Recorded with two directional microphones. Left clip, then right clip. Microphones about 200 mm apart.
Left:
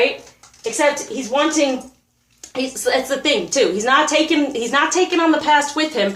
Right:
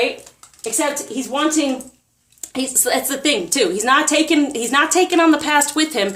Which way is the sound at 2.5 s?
50° right (ahead or behind).